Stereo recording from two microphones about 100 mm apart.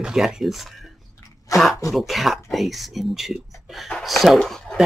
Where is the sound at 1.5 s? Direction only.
35° left (ahead or behind).